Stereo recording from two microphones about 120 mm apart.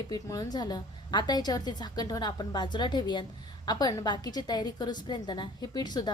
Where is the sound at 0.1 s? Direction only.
30° left (ahead or behind).